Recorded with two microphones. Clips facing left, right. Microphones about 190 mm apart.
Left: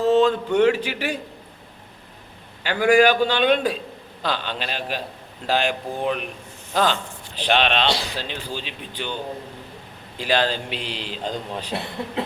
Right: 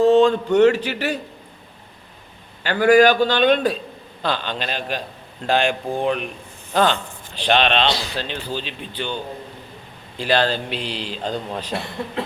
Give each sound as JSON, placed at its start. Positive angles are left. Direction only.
{"t": 0.1, "sound": "speech", "side_deg": 5}
{"t": 2.6, "sound": "speech", "side_deg": 10}
{"t": 7.3, "sound": "speech", "side_deg": 10}
{"t": 10.2, "sound": "speech", "side_deg": 10}
{"t": 10.9, "sound": "speech", "side_deg": -40}
{"t": 11.2, "sound": "speech", "side_deg": -10}
{"t": 11.6, "sound": "speech", "side_deg": 0}